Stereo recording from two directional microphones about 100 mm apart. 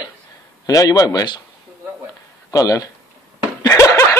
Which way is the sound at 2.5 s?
35° left (ahead or behind).